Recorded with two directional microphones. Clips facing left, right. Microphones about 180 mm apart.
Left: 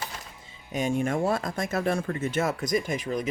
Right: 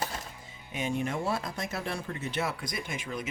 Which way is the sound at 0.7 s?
45° left (ahead or behind).